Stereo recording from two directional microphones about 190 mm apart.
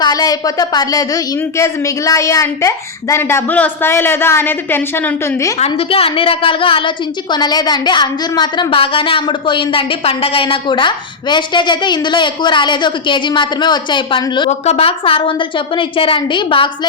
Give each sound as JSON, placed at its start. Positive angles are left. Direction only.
{"t": 0.0, "sound": "a woman's voice", "side_deg": 20}
{"t": 5.5, "sound": "a woman's voice", "side_deg": 30}